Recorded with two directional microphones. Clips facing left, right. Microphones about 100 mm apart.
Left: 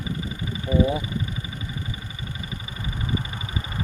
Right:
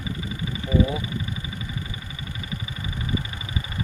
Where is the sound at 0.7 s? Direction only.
30° left (ahead or behind).